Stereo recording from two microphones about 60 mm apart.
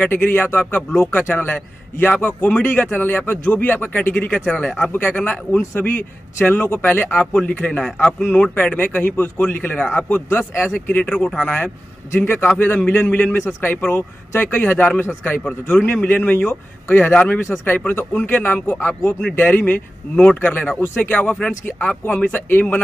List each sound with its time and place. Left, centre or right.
0.0 s speech: left
4.9 s speech: left
16.0 s speech: centre
16.3 s speech: left
20.8 s speech: left
21.1 s speech: left